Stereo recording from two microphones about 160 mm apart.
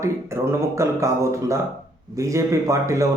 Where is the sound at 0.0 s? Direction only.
15° right (ahead or behind).